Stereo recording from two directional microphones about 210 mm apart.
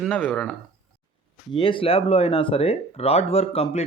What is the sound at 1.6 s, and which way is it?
Speech, 25° left (ahead or behind).